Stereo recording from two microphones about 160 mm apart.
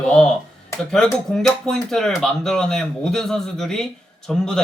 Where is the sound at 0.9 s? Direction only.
5° left (ahead or behind).